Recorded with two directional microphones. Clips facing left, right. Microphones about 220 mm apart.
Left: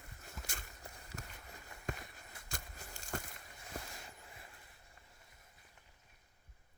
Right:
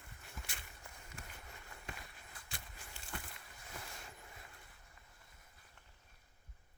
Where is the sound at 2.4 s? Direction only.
45° left (ahead or behind).